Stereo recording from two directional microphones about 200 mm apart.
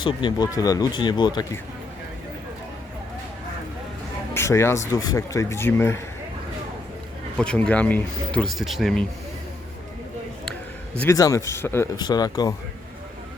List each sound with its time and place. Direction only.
0.0 s speech: 25° left (ahead or behind)
4.4 s speech: 15° left (ahead or behind)
7.3 s speech: 5° left (ahead or behind)
11.0 s speech: 15° left (ahead or behind)